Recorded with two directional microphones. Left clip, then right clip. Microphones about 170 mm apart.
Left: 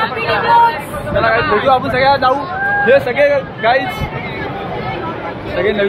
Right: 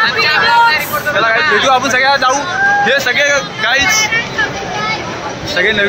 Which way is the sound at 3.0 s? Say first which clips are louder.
Right 1 dB; 20° left (ahead or behind).